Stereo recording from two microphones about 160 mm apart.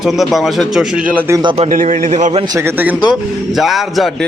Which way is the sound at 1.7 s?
55° right (ahead or behind).